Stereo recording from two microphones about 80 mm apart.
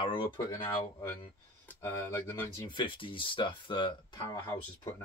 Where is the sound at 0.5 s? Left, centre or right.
Left.